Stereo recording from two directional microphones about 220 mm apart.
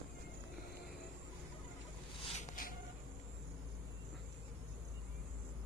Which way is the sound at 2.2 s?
30° left (ahead or behind).